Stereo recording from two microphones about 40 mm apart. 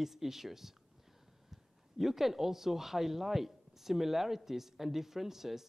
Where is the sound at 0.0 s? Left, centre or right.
Centre.